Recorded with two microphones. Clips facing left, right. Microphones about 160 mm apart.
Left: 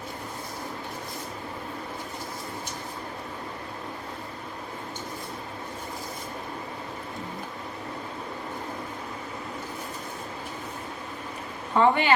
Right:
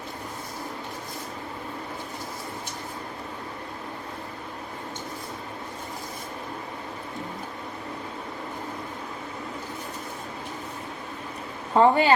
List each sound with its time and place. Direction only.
11.7 s speech: 40° right (ahead or behind)